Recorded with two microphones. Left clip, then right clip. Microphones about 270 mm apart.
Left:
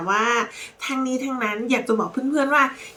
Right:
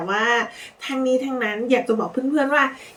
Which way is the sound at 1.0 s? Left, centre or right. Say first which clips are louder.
Right 8 dB; centre.